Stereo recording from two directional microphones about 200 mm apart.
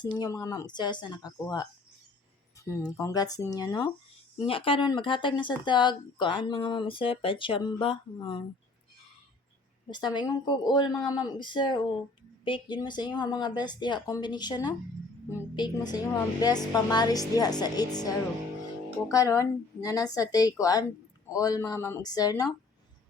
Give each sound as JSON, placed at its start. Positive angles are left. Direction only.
{"t": 0.2, "sound": "a woman's voice", "side_deg": 15}
{"t": 2.6, "sound": "a woman's voice", "side_deg": 15}
{"t": 9.9, "sound": "speech", "side_deg": 20}
{"t": 19.1, "sound": "a woman's voice", "side_deg": 15}